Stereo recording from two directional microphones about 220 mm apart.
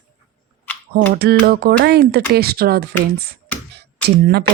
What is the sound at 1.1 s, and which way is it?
Speech, 45° right (ahead or behind).